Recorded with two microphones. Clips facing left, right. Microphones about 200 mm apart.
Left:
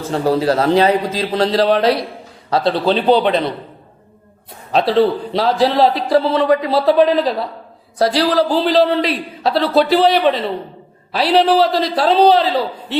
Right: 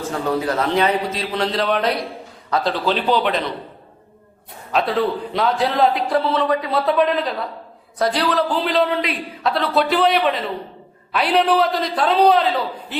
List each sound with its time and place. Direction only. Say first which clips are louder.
0.1 s a man's voice: left 7 dB; 35° left (ahead or behind)
4.7 s a man's voice: left 6 dB; 30° left (ahead or behind)